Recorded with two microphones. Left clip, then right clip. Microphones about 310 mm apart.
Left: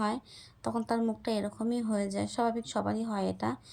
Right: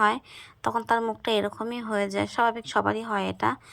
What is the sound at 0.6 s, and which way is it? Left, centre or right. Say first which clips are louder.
A woman's voice: right 7 dB; right.